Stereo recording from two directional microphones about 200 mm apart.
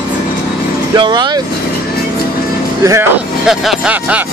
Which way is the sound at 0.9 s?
20° right (ahead or behind).